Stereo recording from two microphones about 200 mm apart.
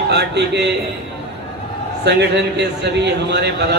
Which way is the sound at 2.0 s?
55° right (ahead or behind).